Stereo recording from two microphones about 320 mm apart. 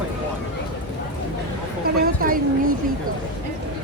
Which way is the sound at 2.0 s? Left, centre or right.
Right.